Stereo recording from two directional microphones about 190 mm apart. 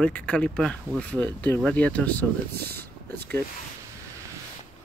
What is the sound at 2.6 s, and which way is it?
Speech, 55° right (ahead or behind).